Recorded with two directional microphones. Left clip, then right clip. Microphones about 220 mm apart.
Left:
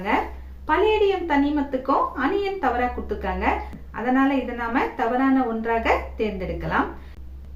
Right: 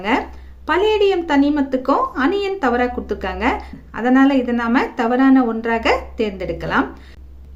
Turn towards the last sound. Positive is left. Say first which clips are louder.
# right 5 dB
turn(degrees=-50)  # may be behind; listen again after turning